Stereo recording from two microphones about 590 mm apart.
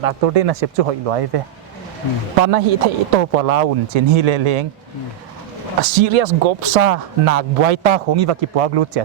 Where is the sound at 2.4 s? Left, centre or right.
Right.